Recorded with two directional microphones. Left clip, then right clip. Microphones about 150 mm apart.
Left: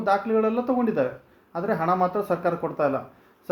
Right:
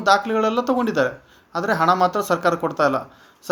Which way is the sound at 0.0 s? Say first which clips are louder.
Right 5 dB; 5° right (ahead or behind).